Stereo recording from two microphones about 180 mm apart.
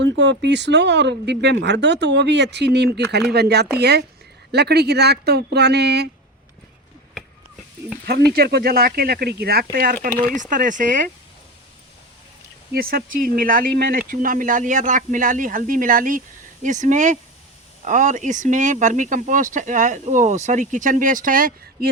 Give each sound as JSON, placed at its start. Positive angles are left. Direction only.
{"t": 0.0, "sound": "speech", "side_deg": -75}
{"t": 8.0, "sound": "speech", "side_deg": -60}
{"t": 12.7, "sound": "speech", "side_deg": -55}